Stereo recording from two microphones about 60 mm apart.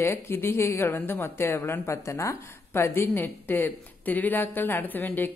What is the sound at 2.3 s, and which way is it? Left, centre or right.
Speech, left.